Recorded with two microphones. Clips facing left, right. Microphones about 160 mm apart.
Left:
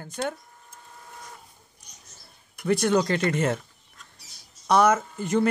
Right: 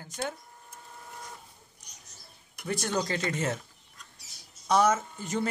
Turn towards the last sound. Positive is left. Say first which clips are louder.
# left 8 dB
turn(degrees=60)  # may be behind; listen again after turning